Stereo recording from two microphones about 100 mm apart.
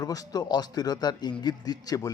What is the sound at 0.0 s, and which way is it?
A man's voice, 40° left (ahead or behind).